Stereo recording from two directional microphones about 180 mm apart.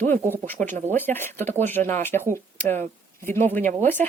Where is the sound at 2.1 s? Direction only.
45° right (ahead or behind).